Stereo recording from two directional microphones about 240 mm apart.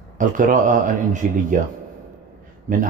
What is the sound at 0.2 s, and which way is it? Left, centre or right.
Speech, right.